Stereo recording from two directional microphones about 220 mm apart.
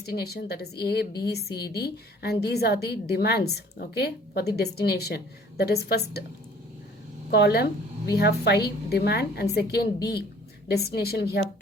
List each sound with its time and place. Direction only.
0.0 s a woman's voice: 45° left (ahead or behind)
7.3 s a woman's voice: 45° left (ahead or behind)